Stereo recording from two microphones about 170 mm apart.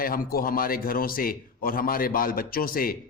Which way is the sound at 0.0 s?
55° left (ahead or behind).